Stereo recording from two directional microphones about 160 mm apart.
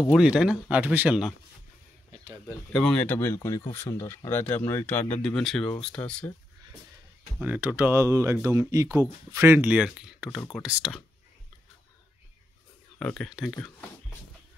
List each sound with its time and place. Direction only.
0.1 s speech: 5° right (ahead or behind)
2.4 s speech: 5° left (ahead or behind)
7.3 s speech: 10° right (ahead or behind)
13.0 s speech: 5° left (ahead or behind)